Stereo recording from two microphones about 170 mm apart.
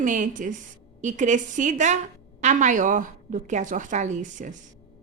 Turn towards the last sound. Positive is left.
turn(degrees=-45)  # may be behind; listen again after turning